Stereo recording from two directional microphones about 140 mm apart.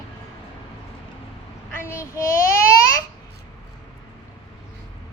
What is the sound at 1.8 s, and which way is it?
Child singing, 20° left (ahead or behind).